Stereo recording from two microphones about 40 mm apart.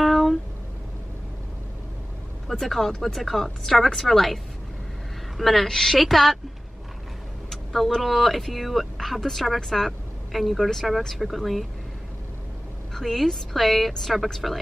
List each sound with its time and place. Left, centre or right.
0.0 s a sound: centre
2.4 s speech: centre
5.4 s speech: centre
7.4 s speech: centre
12.9 s speech: centre